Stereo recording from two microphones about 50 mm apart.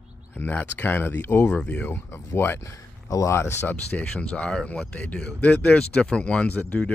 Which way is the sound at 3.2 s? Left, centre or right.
Left.